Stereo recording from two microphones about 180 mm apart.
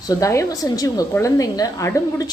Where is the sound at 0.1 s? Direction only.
15° left (ahead or behind).